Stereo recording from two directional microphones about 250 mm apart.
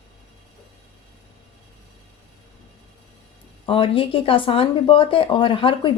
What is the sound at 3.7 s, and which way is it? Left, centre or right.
A woman's voice, left.